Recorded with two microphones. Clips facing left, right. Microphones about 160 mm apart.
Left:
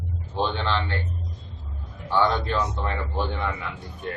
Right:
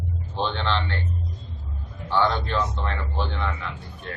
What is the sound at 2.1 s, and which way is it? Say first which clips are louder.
Speech: even; 10° left (ahead or behind).